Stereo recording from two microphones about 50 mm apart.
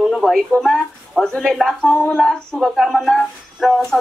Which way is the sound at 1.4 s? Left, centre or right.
Centre.